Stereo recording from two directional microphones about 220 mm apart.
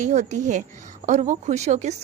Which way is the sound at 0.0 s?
35° right (ahead or behind).